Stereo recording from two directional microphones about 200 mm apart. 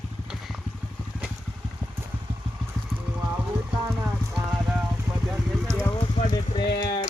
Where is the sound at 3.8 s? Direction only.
15° right (ahead or behind).